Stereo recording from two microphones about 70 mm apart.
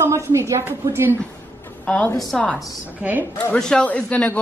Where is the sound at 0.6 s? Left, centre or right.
Right.